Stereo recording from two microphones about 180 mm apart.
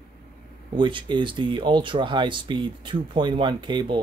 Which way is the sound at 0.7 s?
25° right (ahead or behind).